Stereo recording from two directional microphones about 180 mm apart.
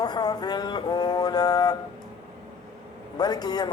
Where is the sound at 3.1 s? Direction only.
20° left (ahead or behind).